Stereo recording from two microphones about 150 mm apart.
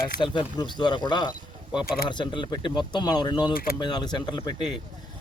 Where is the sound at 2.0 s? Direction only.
30° left (ahead or behind).